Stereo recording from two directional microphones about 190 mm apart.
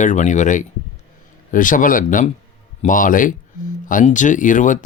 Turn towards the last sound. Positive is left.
turn(degrees=40)  # may be behind; listen again after turning